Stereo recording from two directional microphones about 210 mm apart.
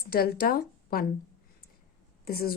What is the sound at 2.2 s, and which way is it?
Speech, 45° left (ahead or behind).